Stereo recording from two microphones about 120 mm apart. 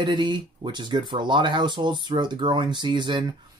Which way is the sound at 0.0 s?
40° right (ahead or behind).